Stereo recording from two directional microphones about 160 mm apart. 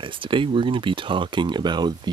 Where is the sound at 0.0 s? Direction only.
30° right (ahead or behind).